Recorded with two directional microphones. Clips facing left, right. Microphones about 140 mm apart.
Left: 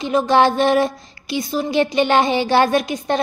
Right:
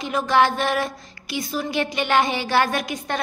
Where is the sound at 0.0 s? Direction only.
25° left (ahead or behind).